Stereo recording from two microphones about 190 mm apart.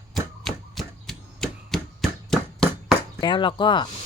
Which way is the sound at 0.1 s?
Centre (ahead or behind).